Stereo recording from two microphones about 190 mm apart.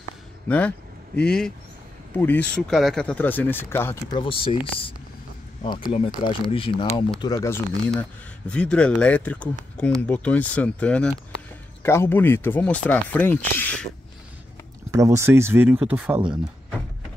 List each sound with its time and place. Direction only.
0.5 s speech: 5° left (ahead or behind)
4.2 s speech: 30° left (ahead or behind); by 13.8 s 10° left (ahead or behind)
14.9 s speech: 15° right (ahead or behind)